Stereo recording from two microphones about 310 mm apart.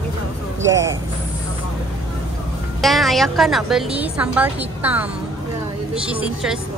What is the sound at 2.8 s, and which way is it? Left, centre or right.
A woman's voice, centre.